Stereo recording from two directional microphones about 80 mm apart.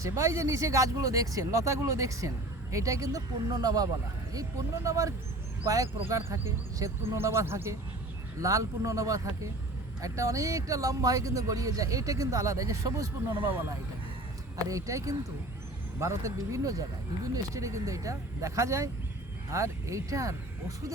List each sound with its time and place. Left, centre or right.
0.0 s speech: right
8.4 s speech: right
13.4 s speech: right
14.7 s speech: right